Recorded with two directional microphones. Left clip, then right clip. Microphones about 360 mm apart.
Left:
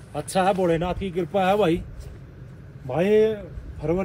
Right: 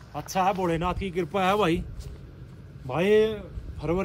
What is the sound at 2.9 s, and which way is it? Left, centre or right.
Speech, centre.